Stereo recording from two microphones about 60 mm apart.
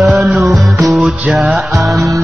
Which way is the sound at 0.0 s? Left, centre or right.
Centre.